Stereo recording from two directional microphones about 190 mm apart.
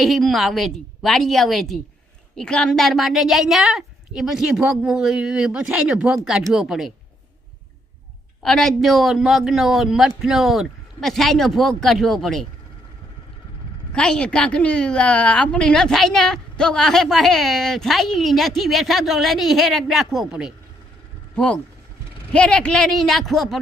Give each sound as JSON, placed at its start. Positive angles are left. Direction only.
{"t": 0.0, "sound": "a woman's voice", "side_deg": 0}
{"t": 8.4, "sound": "a woman's voice", "side_deg": 0}
{"t": 13.9, "sound": "a woman's voice", "side_deg": 5}